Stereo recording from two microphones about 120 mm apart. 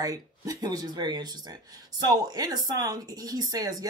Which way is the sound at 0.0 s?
30° right (ahead or behind).